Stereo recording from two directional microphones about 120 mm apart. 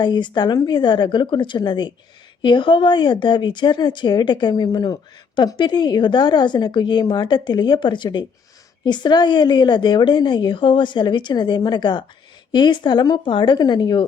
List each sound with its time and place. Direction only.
0.0 s a woman's voice: 35° left (ahead or behind)